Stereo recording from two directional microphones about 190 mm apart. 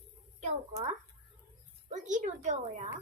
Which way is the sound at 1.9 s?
40° right (ahead or behind).